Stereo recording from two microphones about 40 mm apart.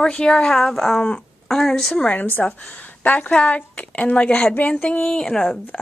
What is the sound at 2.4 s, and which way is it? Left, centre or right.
Speech, left.